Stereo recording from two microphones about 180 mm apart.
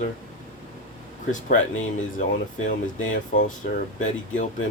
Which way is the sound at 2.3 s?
45° left (ahead or behind).